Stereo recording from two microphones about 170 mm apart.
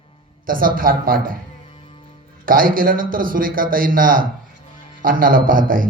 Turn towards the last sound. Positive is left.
turn(degrees=-55)  # may be behind; listen again after turning